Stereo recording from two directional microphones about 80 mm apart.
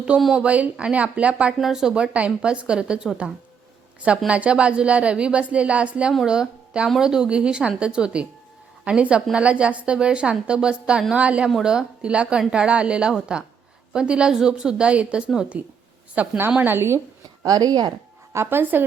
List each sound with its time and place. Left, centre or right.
0.3 s speech: centre
1.5 s speech: centre; by 17.0 s right
17.4 s speech: right
18.3 s speech: right